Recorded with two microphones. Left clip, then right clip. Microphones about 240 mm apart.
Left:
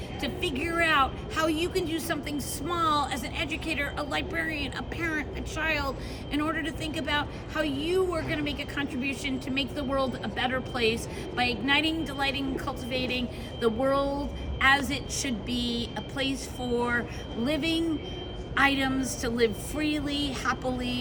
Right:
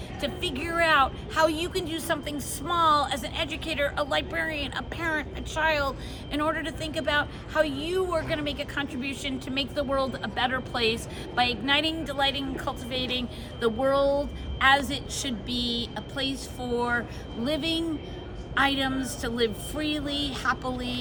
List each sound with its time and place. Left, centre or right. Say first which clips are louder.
0.2 s a woman's voice: even; centre
15.5 s a sound: right 4 dB; right
16.0 s a woman's voice: even; centre